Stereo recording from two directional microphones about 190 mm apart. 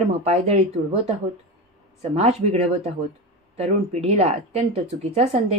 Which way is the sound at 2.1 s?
35° right (ahead or behind).